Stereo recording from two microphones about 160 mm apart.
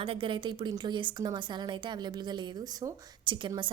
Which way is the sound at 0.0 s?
35° right (ahead or behind).